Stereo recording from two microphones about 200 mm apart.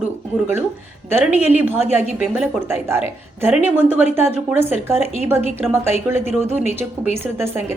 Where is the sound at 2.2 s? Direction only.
10° right (ahead or behind).